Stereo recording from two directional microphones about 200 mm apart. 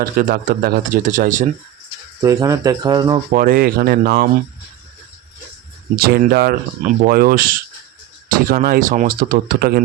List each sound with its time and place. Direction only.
0.0 s speech: 45° right (ahead or behind)
2.2 s speech: 15° right (ahead or behind)
3.2 s speech: 45° right (ahead or behind)
6.0 s speech: 50° right (ahead or behind)